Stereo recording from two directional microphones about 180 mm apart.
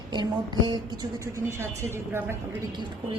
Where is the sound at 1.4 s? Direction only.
15° right (ahead or behind).